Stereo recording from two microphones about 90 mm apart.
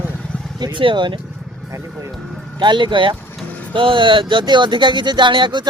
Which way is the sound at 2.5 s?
60° right (ahead or behind).